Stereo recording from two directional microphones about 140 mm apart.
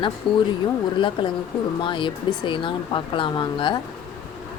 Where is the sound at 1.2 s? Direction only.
35° left (ahead or behind).